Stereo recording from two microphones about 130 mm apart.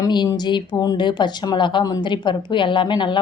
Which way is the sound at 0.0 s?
35° left (ahead or behind).